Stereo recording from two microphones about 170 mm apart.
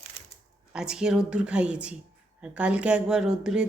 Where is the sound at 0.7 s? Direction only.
5° right (ahead or behind).